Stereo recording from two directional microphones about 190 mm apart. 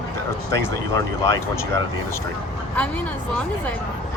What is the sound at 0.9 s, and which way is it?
Speech, 15° left (ahead or behind).